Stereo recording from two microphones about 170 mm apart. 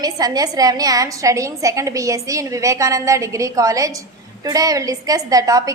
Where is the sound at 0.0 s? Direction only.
20° right (ahead or behind).